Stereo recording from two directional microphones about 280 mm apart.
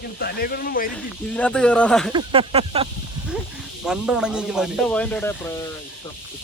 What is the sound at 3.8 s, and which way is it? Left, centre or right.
Speech, centre.